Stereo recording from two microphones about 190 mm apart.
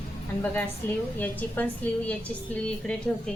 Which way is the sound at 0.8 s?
10° left (ahead or behind).